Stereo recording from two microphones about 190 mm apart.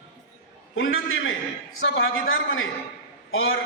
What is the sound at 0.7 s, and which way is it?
A man's voice, 90° left.